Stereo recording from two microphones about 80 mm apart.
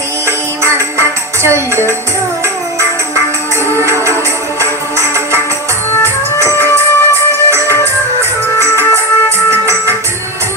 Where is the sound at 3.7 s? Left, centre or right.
Right.